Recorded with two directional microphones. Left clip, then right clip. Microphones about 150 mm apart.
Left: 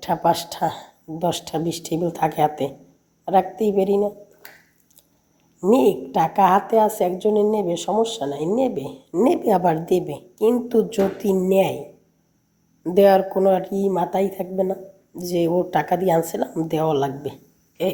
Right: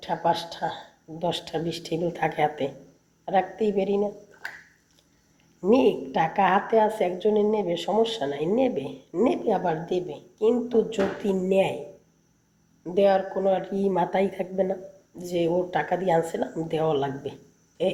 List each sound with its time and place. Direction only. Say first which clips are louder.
0.0 s a woman's voice: left 5 dB; 45° left (ahead or behind)
5.5 s a woman's voice: left 4 dB; 30° left (ahead or behind)
9.3 s a woman's voice: left 6 dB; 50° left (ahead or behind); by 11.8 s 35° left (ahead or behind)
12.8 s a woman's voice: left 6 dB; 55° left (ahead or behind); by 14.8 s 25° left (ahead or behind)
15.2 s a woman's voice: left 4 dB; 40° left (ahead or behind)
17.8 s speech: left 2 dB; 20° left (ahead or behind)